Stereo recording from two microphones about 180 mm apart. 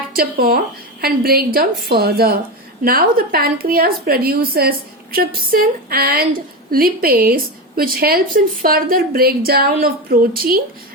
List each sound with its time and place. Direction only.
0.1 s a woman's voice: 55° right (ahead or behind)